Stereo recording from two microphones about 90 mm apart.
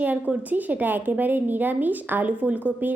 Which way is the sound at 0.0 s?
20° right (ahead or behind).